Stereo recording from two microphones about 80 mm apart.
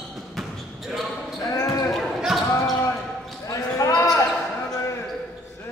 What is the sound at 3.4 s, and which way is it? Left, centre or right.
Basketball bounce, left.